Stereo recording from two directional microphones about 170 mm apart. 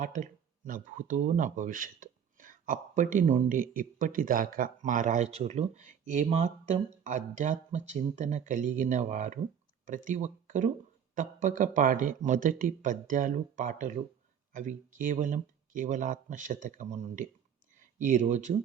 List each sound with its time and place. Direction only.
0.0 s speech: 45° right (ahead or behind)